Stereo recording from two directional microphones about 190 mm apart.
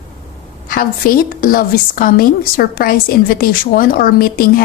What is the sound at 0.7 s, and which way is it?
A woman's voice, 50° left (ahead or behind).